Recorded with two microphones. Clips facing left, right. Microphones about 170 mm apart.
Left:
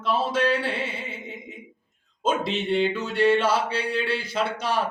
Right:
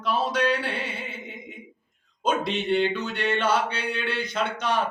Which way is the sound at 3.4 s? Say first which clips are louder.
Left 1 dB; 30° left (ahead or behind).